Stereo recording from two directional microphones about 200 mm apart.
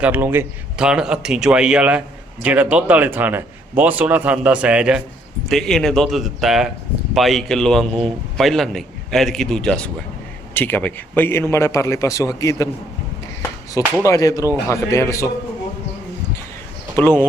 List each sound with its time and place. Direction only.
0.0 s a man's voice: 10° right (ahead or behind); by 12.6 s 15° left (ahead or behind)
14.0 s a man's voice: 15° left (ahead or behind)
17.0 s a man's voice: 10° left (ahead or behind)